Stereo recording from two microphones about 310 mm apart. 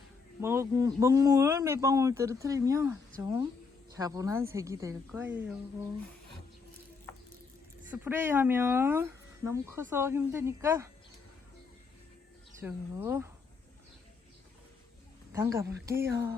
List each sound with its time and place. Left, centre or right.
0.4 s speech: centre
7.9 s speech: centre
12.5 s speech: centre
15.3 s speech: centre